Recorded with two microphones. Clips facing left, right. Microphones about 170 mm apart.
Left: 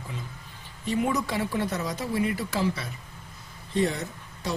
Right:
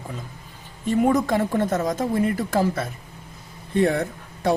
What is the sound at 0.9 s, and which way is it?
Speech, 50° right (ahead or behind).